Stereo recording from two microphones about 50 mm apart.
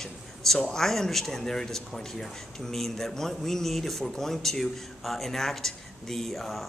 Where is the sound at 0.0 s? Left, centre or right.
Centre.